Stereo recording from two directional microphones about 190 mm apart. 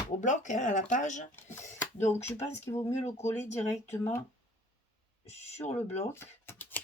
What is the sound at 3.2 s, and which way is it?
Speech, 10° left (ahead or behind).